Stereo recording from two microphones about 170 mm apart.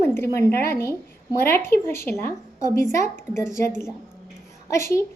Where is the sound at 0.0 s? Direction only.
15° left (ahead or behind).